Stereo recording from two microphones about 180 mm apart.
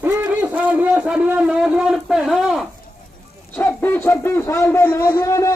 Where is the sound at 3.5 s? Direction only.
10° left (ahead or behind).